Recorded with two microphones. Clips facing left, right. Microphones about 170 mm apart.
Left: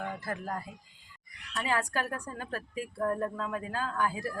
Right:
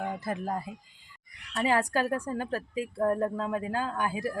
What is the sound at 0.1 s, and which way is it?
Speech, 20° right (ahead or behind).